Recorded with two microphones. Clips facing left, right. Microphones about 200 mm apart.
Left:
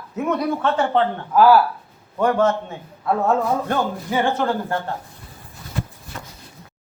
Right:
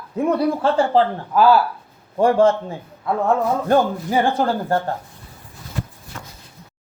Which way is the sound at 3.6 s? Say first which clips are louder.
Right 6 dB; 35° right (ahead or behind).